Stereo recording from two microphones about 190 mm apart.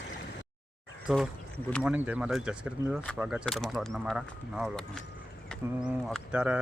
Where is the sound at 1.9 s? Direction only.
10° right (ahead or behind).